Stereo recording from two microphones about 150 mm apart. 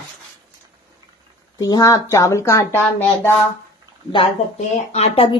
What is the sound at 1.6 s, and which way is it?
Speech, 25° left (ahead or behind).